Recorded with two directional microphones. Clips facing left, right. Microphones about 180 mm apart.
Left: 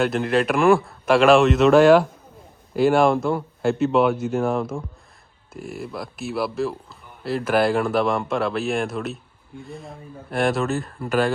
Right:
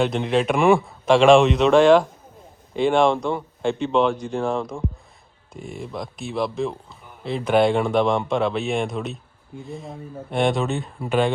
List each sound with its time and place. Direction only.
0.0 s a man's voice: centre (ahead or behind)